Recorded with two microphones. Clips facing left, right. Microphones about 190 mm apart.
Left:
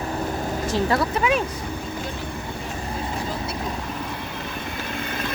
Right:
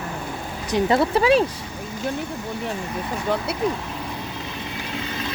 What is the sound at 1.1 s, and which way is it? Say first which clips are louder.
Speech: right 5 dB; 30° right (ahead or behind).